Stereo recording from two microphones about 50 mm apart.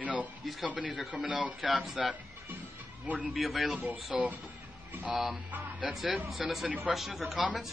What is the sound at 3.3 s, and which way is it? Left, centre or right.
Speech, centre.